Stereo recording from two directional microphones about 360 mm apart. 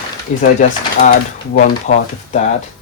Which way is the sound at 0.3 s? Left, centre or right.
Centre.